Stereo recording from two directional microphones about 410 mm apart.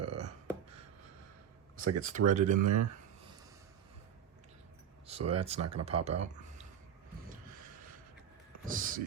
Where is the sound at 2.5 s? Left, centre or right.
Right.